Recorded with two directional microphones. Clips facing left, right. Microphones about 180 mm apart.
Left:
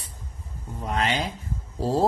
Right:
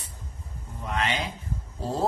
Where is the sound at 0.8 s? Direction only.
35° left (ahead or behind).